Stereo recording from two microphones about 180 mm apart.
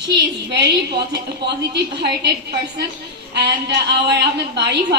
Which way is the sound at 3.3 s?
70° right (ahead or behind).